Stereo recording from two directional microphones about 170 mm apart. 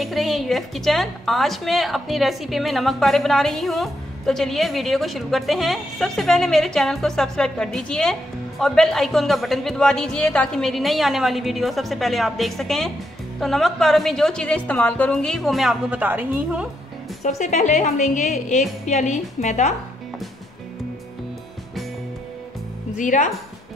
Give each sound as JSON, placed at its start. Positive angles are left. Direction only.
{"t": 0.0, "sound": "a woman's voice", "side_deg": 0}
{"t": 17.4, "sound": "a woman's voice", "side_deg": 45}
{"t": 22.9, "sound": "a woman's voice", "side_deg": 50}